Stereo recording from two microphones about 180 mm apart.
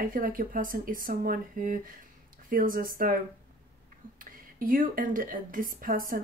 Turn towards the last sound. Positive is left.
turn(degrees=-50)  # may be behind; listen again after turning